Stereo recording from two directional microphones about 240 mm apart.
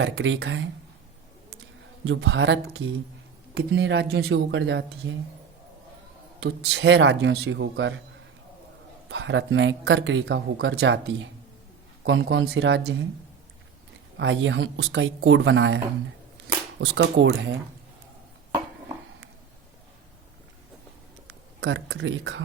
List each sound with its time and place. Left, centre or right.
0.0 s speech: right
2.0 s speech: right
6.4 s speech: right
9.0 s speech: right
14.2 s speech: right
21.2 s speech: right